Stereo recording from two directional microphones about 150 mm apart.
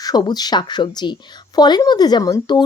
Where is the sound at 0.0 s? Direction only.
25° left (ahead or behind).